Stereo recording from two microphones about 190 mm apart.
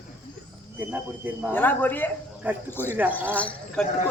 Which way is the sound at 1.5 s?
10° left (ahead or behind).